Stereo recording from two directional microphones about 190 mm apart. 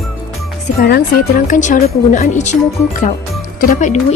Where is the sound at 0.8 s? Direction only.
55° left (ahead or behind).